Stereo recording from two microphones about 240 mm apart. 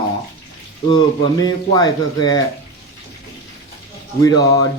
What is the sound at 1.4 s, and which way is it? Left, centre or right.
Speech, centre.